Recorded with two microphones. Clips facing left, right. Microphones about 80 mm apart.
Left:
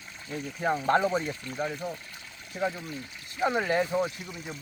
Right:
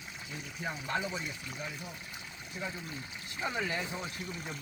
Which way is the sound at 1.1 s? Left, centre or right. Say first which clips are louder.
Left 9 dB; left.